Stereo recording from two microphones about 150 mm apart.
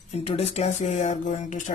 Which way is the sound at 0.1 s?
45° left (ahead or behind).